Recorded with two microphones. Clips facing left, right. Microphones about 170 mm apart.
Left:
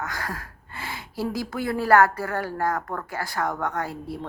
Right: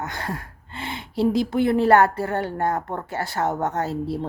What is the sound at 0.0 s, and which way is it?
Speech, 25° right (ahead or behind).